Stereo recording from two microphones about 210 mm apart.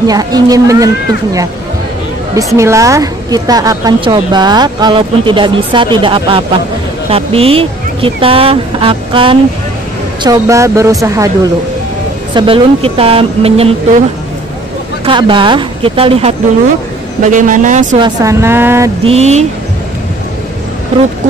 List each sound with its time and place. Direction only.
0.0 s speech: 15° right (ahead or behind)
2.3 s a woman's voice: 15° right (ahead or behind)
12.4 s a woman's voice: 25° right (ahead or behind)
15.0 s a woman's voice: 25° right (ahead or behind)
18.0 s speech: 15° right (ahead or behind)
19.0 s speech: 30° right (ahead or behind)